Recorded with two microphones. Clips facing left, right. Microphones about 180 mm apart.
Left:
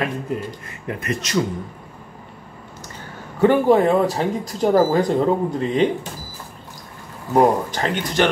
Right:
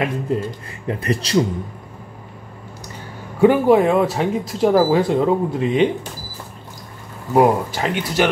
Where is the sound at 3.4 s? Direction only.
5° right (ahead or behind).